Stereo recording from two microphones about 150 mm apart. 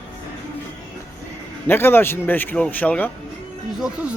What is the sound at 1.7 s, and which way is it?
A man's voice, 15° left (ahead or behind).